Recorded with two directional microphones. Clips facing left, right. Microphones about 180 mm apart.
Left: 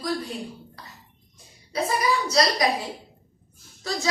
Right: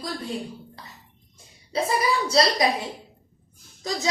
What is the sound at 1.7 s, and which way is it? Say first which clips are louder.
Speech: right 1 dB; 30° right (ahead or behind).